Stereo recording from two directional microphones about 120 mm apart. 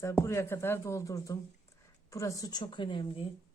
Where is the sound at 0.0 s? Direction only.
25° left (ahead or behind); by 3.2 s 45° left (ahead or behind).